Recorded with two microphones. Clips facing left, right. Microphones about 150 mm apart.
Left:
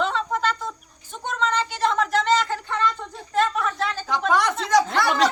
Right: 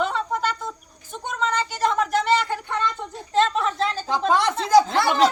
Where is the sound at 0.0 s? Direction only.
5° right (ahead or behind).